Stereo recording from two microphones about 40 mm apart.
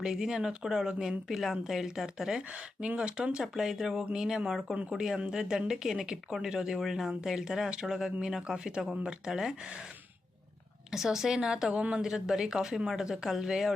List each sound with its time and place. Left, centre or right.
0.0 s speech: centre
1.3 s speech: centre
2.5 s speech: right
3.4 s speech: centre
4.7 s speech: right
4.9 s speech: centre
10.9 s speech: centre
11.7 s speech: right